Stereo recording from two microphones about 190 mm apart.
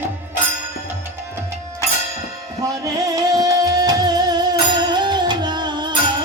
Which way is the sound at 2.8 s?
15° right (ahead or behind).